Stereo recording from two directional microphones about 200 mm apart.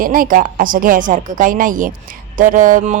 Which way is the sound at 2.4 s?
40° right (ahead or behind).